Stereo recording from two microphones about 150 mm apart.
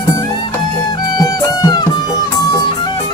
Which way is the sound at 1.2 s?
25° left (ahead or behind).